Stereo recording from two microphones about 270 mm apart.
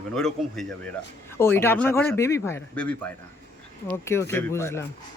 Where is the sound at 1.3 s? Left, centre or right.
Centre.